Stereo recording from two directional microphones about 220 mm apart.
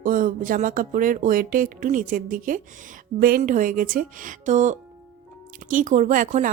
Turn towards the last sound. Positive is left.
turn(degrees=-35)  # may be behind; listen again after turning